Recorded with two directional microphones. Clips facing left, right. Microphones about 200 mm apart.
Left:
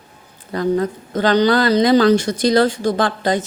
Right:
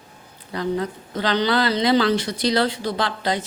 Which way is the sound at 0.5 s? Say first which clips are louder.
Left 6 dB; 45° left (ahead or behind).